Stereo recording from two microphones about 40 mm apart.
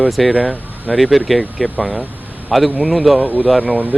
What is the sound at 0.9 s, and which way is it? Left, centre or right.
Speech, centre.